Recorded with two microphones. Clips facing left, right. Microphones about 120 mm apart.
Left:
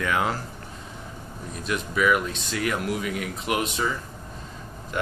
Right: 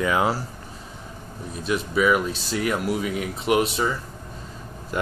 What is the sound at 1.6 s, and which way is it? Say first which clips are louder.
Speech: right 2 dB; 30° right (ahead or behind).